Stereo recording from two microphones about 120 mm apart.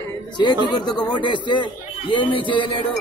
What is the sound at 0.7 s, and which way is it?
Speech, 35° left (ahead or behind).